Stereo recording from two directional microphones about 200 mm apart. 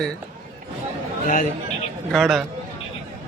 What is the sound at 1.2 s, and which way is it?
Speech, 40° left (ahead or behind).